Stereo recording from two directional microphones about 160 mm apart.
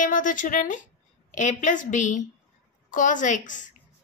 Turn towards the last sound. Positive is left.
turn(degrees=55)  # may be behind; listen again after turning